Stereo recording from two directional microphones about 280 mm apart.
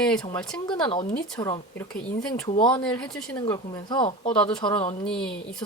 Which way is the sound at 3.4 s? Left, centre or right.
Centre.